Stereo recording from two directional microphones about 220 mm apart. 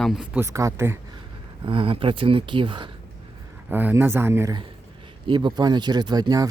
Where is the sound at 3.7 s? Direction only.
10° right (ahead or behind).